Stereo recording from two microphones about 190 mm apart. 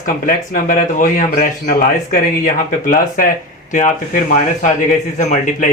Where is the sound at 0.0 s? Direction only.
45° left (ahead or behind).